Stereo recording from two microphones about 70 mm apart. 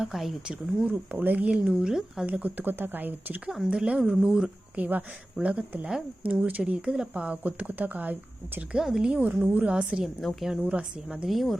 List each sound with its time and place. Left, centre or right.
0.0 s a woman's voice: centre
0.4 s speech: right
2.2 s speech: right
3.7 s speech: centre
8.7 s speech: centre
10.0 s a woman's voice: centre
10.5 s speech: centre
11.3 s a woman's voice: centre